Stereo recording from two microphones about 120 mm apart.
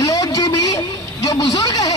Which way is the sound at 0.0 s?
30° left (ahead or behind).